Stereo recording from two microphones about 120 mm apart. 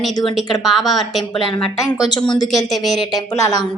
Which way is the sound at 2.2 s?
40° left (ahead or behind).